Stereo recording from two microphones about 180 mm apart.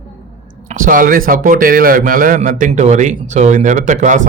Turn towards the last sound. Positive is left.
turn(degrees=-45)  # may be behind; listen again after turning